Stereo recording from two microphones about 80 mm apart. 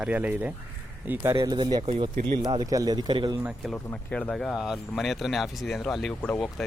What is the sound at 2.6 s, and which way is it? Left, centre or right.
Speech, right.